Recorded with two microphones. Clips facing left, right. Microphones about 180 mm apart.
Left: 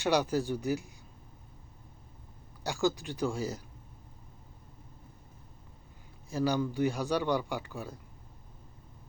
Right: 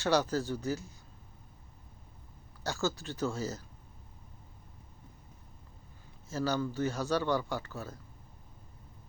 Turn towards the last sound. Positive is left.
turn(degrees=15)  # may be behind; listen again after turning